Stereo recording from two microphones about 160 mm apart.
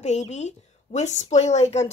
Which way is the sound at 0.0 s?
45° left (ahead or behind).